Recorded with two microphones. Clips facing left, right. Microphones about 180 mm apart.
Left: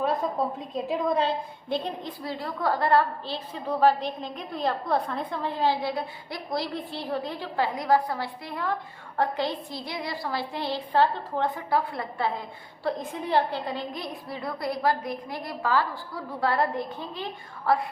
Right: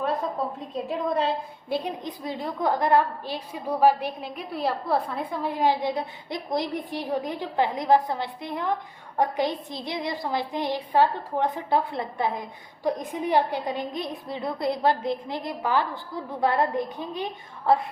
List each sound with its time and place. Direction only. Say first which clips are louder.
0.0 s a sound: left 1 dB; centre (ahead or behind)
0.7 s a woman's voice: even; centre (ahead or behind)
1.7 s a woman's voice: right 1 dB; 15° right (ahead or behind)